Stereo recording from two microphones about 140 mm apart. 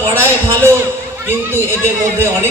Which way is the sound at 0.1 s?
20° right (ahead or behind).